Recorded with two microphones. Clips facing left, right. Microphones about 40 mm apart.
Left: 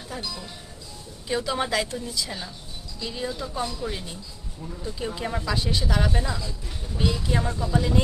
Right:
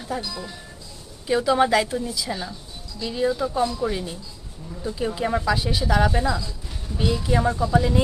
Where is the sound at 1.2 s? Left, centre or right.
Centre.